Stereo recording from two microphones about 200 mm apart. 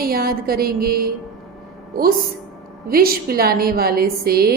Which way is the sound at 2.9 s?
50° right (ahead or behind).